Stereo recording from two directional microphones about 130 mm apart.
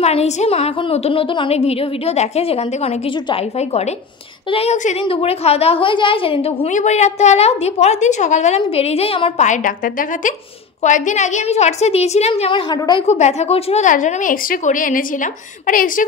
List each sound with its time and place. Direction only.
0.0 s a woman's voice: 55° left (ahead or behind)
4.5 s a woman's voice: 50° left (ahead or behind)
6.7 s a woman's voice: 65° left (ahead or behind)
9.5 s a woman's voice: 90° left
10.8 s a woman's voice: 70° left (ahead or behind); by 13.0 s 35° left (ahead or behind)
13.0 s a woman's voice: 60° left (ahead or behind)
13.8 s a woman's voice: 80° left